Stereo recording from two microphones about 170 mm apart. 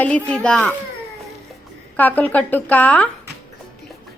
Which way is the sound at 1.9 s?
10° left (ahead or behind).